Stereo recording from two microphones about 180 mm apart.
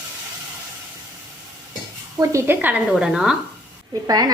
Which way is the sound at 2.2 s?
15° right (ahead or behind).